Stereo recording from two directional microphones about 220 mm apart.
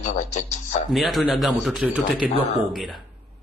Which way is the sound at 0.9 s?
Centre (ahead or behind).